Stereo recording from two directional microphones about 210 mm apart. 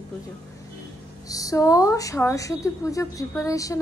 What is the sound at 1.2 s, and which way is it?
A woman's voice, 15° left (ahead or behind).